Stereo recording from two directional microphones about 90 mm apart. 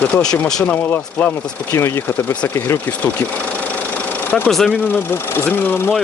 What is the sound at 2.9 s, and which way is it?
Engine, 15° left (ahead or behind).